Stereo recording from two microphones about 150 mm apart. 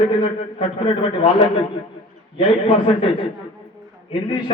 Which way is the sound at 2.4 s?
40° left (ahead or behind).